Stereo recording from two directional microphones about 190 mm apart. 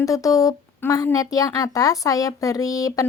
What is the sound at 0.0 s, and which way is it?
A woman's voice, 15° left (ahead or behind).